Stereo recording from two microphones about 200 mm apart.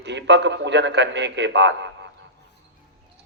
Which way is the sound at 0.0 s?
60° right (ahead or behind).